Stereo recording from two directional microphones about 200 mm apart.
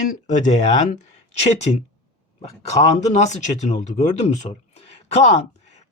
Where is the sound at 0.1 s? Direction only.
40° left (ahead or behind).